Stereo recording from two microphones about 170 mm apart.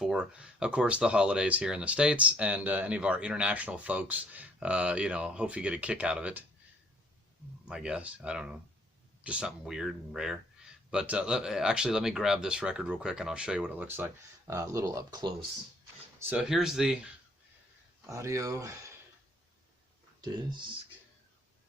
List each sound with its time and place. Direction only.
0.0 s speech: 5° right (ahead or behind)
7.7 s speech: 5° right (ahead or behind); by 15.4 s 25° right (ahead or behind)
16.3 s speech: 5° right (ahead or behind)
18.0 s speech: 15° right (ahead or behind)
20.2 s speech: 25° right (ahead or behind)